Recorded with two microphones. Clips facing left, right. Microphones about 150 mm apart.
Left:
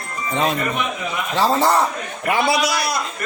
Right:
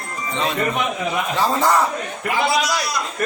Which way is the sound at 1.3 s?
30° left (ahead or behind).